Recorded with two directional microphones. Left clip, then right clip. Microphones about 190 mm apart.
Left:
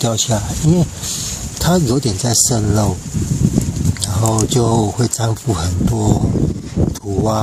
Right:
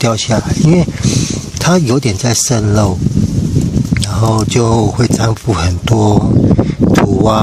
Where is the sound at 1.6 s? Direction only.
35° right (ahead or behind).